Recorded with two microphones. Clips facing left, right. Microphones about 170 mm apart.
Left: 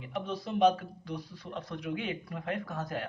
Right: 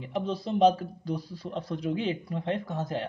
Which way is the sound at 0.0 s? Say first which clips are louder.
Right 5 dB; 30° right (ahead or behind).